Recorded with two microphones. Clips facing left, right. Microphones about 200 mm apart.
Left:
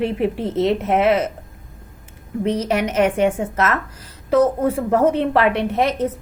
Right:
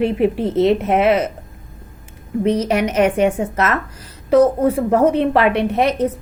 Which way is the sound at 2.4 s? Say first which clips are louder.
Right 3 dB; 15° right (ahead or behind).